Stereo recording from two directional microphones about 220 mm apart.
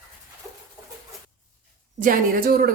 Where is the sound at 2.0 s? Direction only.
40° right (ahead or behind).